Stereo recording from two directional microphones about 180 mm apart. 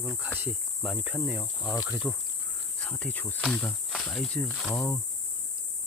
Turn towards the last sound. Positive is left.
turn(degrees=15)  # may be behind; listen again after turning